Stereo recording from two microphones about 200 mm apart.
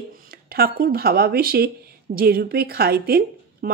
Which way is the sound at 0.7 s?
50° right (ahead or behind).